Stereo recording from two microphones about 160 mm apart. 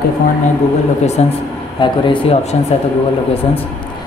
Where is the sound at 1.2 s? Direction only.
40° left (ahead or behind).